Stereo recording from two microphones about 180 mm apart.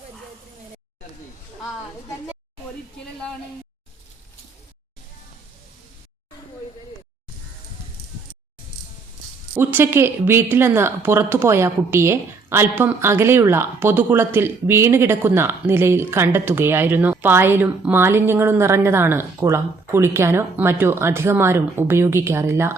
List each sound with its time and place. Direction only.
9.6 s a woman's voice: 10° right (ahead or behind)